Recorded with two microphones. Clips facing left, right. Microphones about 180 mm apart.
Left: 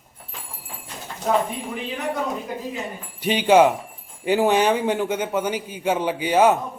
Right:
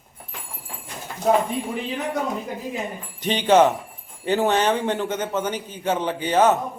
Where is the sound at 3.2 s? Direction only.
10° left (ahead or behind).